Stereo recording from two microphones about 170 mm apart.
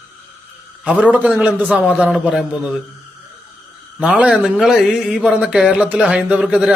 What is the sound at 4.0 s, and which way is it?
A man's voice, 5° right (ahead or behind).